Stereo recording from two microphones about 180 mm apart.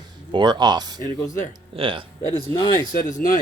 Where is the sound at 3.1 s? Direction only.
50° left (ahead or behind).